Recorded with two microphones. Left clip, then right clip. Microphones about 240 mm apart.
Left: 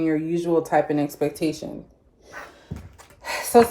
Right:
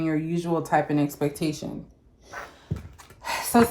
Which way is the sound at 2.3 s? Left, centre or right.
Centre.